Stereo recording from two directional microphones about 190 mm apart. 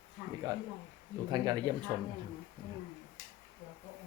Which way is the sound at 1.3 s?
20° right (ahead or behind).